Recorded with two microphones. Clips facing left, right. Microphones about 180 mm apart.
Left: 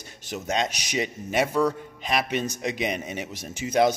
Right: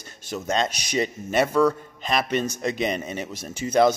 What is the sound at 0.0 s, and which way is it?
Speech, 15° left (ahead or behind).